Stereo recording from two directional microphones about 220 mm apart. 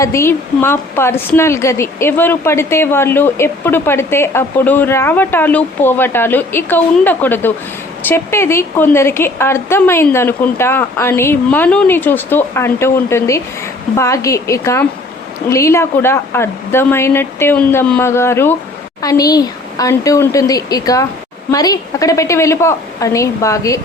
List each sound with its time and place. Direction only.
0.0 s speech: 15° left (ahead or behind)